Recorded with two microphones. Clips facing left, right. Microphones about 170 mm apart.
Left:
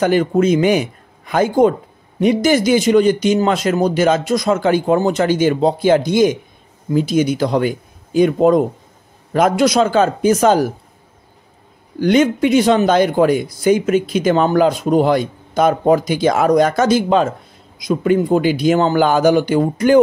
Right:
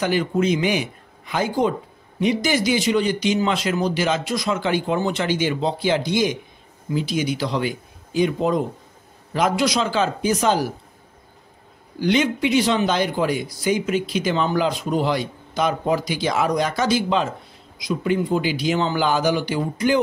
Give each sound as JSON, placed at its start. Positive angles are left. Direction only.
{"t": 0.0, "sound": "a man's voice", "side_deg": 50}
{"t": 12.0, "sound": "a man's voice", "side_deg": 50}